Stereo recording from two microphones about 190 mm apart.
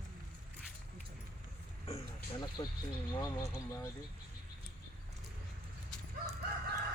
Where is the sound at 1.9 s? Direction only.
25° left (ahead or behind).